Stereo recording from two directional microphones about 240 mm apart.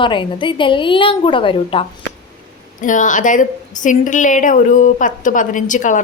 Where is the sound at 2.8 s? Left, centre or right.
Left.